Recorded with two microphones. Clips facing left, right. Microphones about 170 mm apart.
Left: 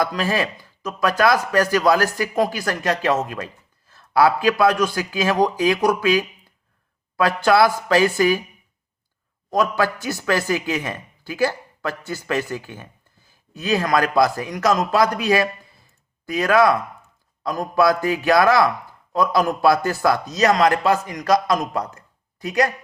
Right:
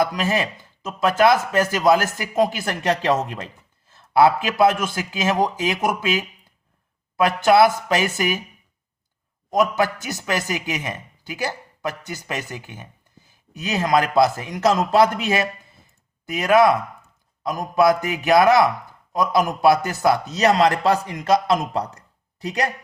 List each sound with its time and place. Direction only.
0.0 s speech: 20° right (ahead or behind)
9.5 s speech: 20° right (ahead or behind)
21.9 s a sound: 30° right (ahead or behind)